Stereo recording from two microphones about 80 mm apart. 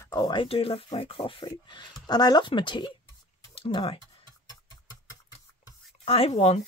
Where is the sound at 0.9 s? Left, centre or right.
Left.